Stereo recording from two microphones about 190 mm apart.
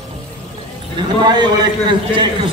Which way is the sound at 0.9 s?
25° right (ahead or behind).